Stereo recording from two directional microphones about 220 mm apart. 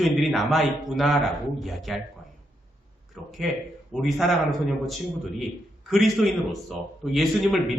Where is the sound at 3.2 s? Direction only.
Centre (ahead or behind).